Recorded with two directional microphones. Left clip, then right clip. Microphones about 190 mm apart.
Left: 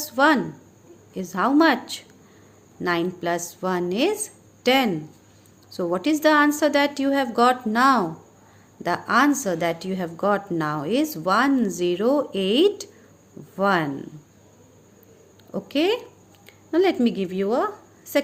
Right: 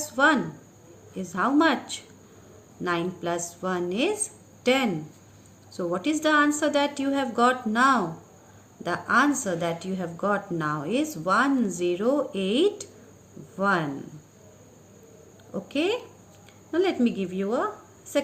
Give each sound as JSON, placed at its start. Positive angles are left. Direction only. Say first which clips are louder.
{"t": 0.0, "sound": "a sound", "louder": "left 3 dB", "side_deg": 45}
{"t": 1.1, "sound": "a woman's voice", "louder": "left 3 dB", "side_deg": 45}
{"t": 15.5, "sound": "a woman's voice", "louder": "left 4 dB", "side_deg": 45}